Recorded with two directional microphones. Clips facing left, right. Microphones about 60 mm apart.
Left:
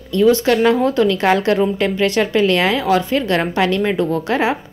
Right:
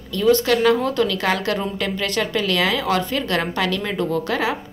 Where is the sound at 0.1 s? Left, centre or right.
Left.